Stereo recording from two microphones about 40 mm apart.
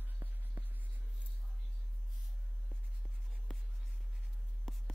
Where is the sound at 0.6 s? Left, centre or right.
Right.